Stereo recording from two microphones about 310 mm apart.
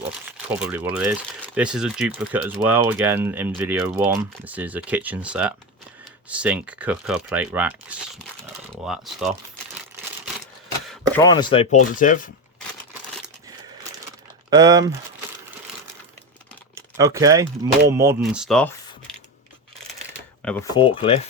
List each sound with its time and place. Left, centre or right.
0.3 s speech: centre
11.1 s speech: centre
14.5 s speech: centre
16.7 s typing: centre
17.6 s speech: centre
20.4 s speech: centre
20.7 s speech: centre